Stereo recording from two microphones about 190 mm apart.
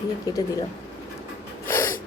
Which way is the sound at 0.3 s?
20° left (ahead or behind).